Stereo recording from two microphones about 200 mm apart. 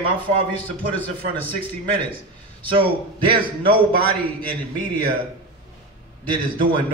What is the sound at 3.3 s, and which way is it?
Speech, 25° right (ahead or behind).